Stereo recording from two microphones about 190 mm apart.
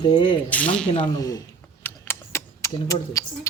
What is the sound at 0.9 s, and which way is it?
Speech, 20° left (ahead or behind).